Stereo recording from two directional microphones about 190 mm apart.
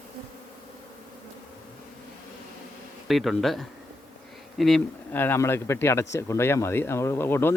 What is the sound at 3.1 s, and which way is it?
A man's voice, centre (ahead or behind).